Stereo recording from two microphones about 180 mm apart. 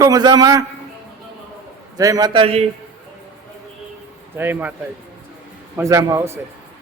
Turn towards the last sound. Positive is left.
turn(degrees=-15)  # may be behind; listen again after turning